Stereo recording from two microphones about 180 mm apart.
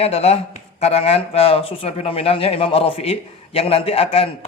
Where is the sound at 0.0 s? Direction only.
35° left (ahead or behind).